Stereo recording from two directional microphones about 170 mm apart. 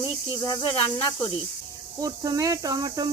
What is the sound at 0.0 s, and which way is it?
Snake, 25° left (ahead or behind).